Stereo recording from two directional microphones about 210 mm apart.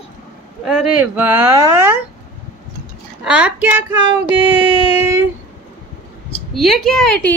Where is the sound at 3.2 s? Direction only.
5° right (ahead or behind).